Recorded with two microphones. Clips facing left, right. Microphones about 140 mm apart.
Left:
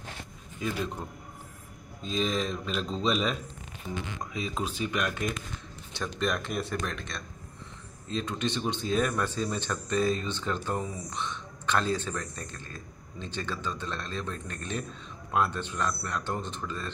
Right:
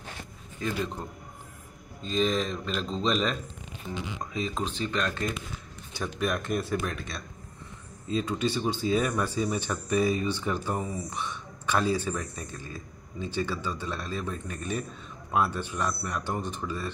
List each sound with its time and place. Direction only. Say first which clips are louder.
0.6 s speech: right 1 dB; 5° left (ahead or behind)
2.0 s speech: right 3 dB; centre (ahead or behind)
3.9 s a man's voice: right 1 dB; 15° right (ahead or behind)
4.3 s speech: right 2 dB; 5° left (ahead or behind)
5.9 s a man's voice: right 1 dB; 5° right (ahead or behind)